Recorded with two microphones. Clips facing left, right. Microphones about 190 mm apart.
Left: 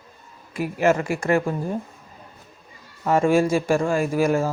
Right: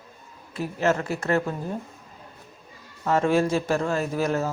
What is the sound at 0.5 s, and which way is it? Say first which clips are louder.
Speech: left 4 dB; 10° left (ahead or behind).